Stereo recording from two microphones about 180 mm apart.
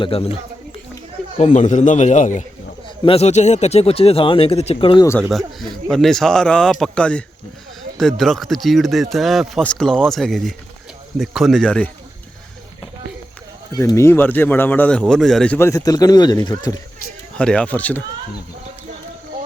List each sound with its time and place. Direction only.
0.0 s speech: 30° left (ahead or behind)
1.4 s speech: 40° left (ahead or behind)
5.3 s speech: centre (ahead or behind)
13.7 s a man's voice: 15° left (ahead or behind)
15.5 s speech: 15° left (ahead or behind)
17.3 s a man's voice: 5° left (ahead or behind)